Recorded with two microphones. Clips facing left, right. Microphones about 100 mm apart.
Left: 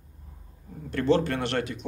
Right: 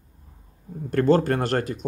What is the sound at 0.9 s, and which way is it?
Speech, 45° right (ahead or behind).